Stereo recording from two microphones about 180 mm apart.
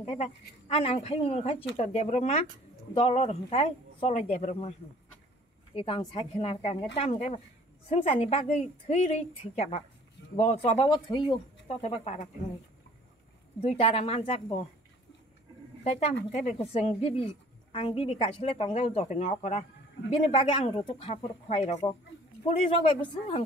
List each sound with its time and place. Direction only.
0.0 s speech: 30° left (ahead or behind)
5.8 s speech: 30° left (ahead or behind)
11.8 s speech: 35° left (ahead or behind)
13.6 s speech: 35° left (ahead or behind)
15.8 s speech: 35° left (ahead or behind)